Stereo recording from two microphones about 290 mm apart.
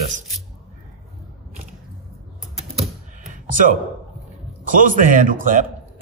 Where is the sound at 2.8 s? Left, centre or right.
Right.